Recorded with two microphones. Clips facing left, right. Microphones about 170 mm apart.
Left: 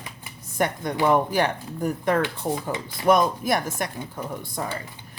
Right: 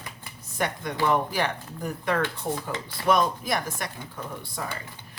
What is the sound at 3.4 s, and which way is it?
Speech, 50° left (ahead or behind).